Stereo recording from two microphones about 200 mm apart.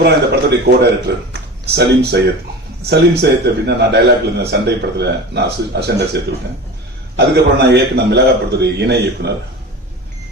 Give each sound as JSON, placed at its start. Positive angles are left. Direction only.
{"t": 0.5, "sound": "a man's voice", "side_deg": -55}